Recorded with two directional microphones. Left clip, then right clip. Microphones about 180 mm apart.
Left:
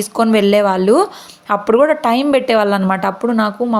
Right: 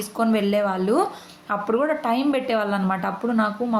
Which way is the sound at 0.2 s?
50° left (ahead or behind).